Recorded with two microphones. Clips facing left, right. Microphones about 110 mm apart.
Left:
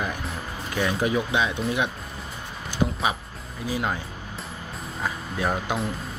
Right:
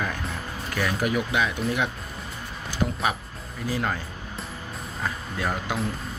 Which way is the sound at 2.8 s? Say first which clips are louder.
Left 1 dB; 15° left (ahead or behind).